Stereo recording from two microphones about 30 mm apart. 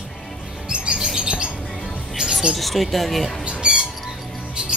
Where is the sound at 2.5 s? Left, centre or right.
Centre.